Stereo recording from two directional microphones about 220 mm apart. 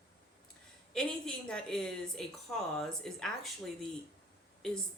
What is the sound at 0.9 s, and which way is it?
A woman's voice, 5° left (ahead or behind).